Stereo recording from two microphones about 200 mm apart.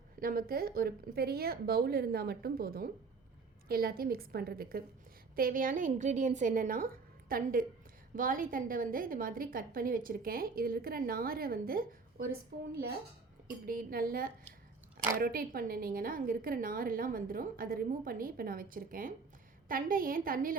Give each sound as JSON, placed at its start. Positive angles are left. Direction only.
{"t": 0.2, "sound": "a woman's voice", "side_deg": -45}